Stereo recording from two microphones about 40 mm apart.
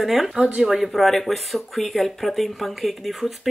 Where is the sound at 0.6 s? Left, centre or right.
Centre.